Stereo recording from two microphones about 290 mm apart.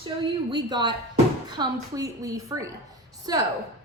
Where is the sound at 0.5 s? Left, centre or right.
Centre.